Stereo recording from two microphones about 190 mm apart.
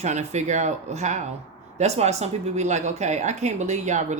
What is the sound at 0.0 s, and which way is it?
Speech, 35° right (ahead or behind).